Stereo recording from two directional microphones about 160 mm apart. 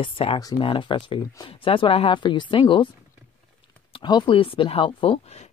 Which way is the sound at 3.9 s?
30° left (ahead or behind).